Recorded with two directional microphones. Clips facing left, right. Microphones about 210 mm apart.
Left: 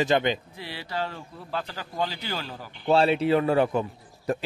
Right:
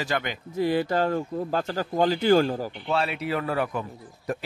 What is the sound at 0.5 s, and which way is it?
Speech, 50° right (ahead or behind).